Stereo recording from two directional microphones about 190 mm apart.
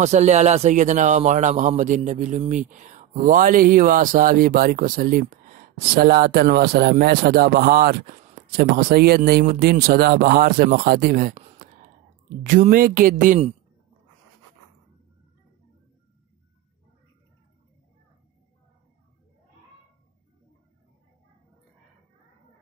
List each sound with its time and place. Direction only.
0.0 s speech: 35° right (ahead or behind)
12.4 s speech: 45° right (ahead or behind)